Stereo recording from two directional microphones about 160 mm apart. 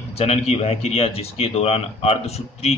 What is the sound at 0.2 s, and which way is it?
A man's voice, 40° left (ahead or behind).